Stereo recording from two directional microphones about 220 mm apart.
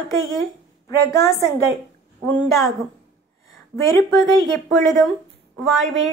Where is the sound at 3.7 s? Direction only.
Centre (ahead or behind).